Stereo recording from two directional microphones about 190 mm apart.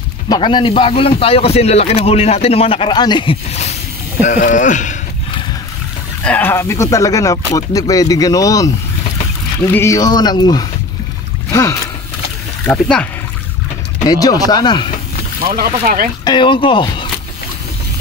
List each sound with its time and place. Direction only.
0.3 s speech: 25° left (ahead or behind); by 4.9 s 40° left (ahead or behind)
6.2 s speech: 10° left (ahead or behind)
9.7 s speech: 15° left (ahead or behind)
12.7 s speech: 5° left (ahead or behind)
14.0 s speech: 20° left (ahead or behind)
15.4 s speech: 50° right (ahead or behind)
16.3 s speech: 25° left (ahead or behind)